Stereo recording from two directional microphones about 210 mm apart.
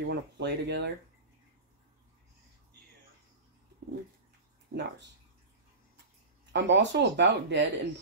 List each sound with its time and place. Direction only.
0.0 s speech: 55° right (ahead or behind)
4.7 s speech: 55° right (ahead or behind)
6.5 s speech: 55° right (ahead or behind)